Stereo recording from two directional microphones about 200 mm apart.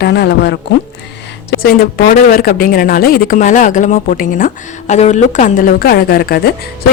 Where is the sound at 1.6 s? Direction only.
45° left (ahead or behind).